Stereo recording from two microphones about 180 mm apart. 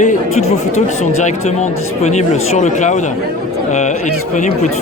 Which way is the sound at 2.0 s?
40° left (ahead or behind).